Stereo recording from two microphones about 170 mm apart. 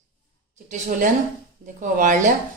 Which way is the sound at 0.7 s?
50° right (ahead or behind).